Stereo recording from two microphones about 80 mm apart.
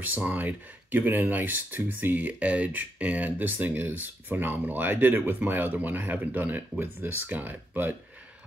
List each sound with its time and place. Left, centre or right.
0.1 s speech: centre